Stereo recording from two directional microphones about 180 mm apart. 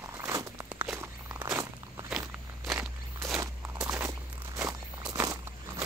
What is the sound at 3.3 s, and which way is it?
Walk, 15° right (ahead or behind).